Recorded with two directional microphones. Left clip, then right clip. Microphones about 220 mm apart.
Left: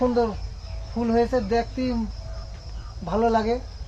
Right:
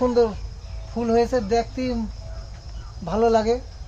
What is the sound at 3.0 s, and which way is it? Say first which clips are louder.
Speech: right 3 dB; 50° right (ahead or behind).